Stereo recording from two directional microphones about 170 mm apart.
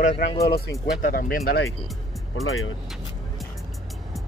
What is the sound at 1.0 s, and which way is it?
Speech, 55° left (ahead or behind).